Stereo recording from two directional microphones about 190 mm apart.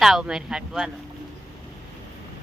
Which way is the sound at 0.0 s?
Centre (ahead or behind).